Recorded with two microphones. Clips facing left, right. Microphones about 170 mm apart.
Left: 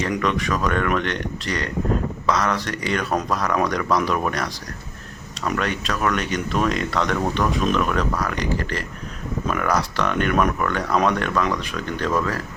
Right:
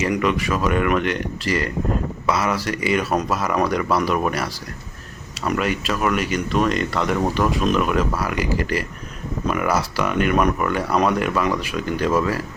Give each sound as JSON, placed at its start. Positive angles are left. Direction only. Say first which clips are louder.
{"t": 0.0, "sound": "speech", "louder": "right 2 dB", "side_deg": -5}
{"t": 5.5, "sound": "speech", "louder": "right 2 dB", "side_deg": -5}